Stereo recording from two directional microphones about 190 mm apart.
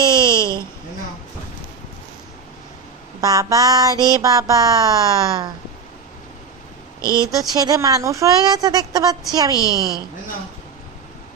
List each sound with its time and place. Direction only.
0.0 s a sound: 20° right (ahead or behind)
0.3 s a sound: 15° left (ahead or behind)
3.2 s speech: 20° right (ahead or behind)
7.0 s speech: 15° left (ahead or behind)
7.3 s speech: 20° right (ahead or behind)
9.6 s a woman's voice: 20° left (ahead or behind)